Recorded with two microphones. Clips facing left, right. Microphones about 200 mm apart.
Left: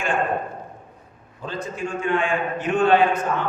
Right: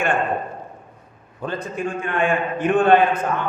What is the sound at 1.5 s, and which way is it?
A man's voice, 55° right (ahead or behind).